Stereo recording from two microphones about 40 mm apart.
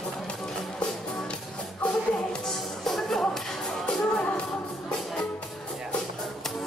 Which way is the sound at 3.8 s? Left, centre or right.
Left.